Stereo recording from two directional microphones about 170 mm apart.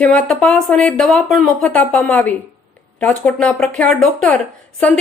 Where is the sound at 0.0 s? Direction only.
5° left (ahead or behind).